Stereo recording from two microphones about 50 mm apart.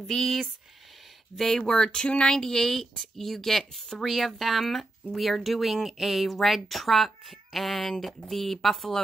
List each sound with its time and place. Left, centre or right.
0.0 s speech: centre
1.6 s speech: centre
2.3 s speech: centre